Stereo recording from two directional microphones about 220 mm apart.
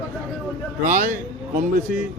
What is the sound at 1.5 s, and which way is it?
Speech, 35° right (ahead or behind).